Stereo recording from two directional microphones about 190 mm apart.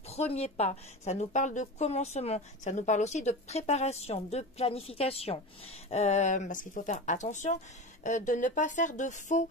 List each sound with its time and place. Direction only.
0.1 s a woman's voice: 35° left (ahead or behind)